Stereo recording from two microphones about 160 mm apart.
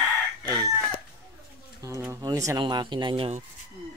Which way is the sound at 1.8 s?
15° right (ahead or behind).